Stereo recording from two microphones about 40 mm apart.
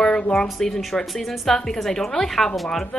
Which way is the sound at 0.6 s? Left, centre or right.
Centre.